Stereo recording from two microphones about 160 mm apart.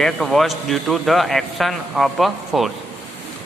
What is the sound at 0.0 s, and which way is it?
A man's voice, centre (ahead or behind).